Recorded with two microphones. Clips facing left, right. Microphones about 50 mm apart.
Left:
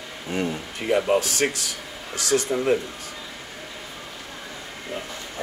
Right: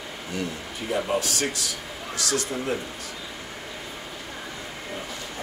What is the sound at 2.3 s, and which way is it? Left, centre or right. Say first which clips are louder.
Speech: left 8 dB; left.